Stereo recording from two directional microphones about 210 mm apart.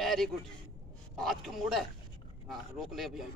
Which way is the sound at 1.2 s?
Centre (ahead or behind).